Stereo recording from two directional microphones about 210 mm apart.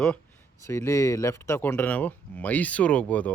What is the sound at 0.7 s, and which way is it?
Speech, 15° left (ahead or behind).